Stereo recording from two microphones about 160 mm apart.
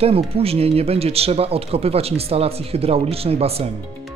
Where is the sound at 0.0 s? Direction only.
40° right (ahead or behind).